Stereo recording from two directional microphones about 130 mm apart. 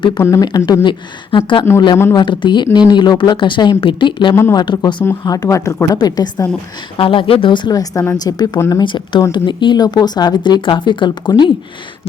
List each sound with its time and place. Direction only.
0.2 s a woman's voice: 20° left (ahead or behind)
8.5 s a woman's voice: 20° left (ahead or behind)
8.8 s speech: 40° left (ahead or behind)